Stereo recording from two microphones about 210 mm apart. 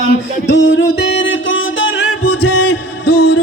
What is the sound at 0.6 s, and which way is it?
Music, 65° left (ahead or behind).